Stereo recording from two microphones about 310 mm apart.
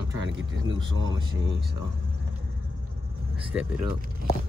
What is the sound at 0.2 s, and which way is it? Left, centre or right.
Speech, right.